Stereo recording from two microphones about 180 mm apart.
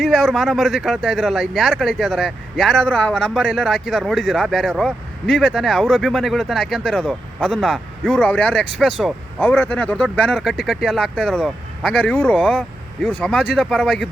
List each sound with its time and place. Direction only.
0.0 s speech: centre (ahead or behind)